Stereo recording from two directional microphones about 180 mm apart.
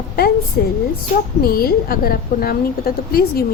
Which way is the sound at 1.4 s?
55° left (ahead or behind).